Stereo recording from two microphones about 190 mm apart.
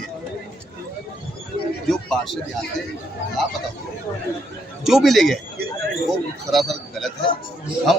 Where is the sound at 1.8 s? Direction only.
Centre (ahead or behind).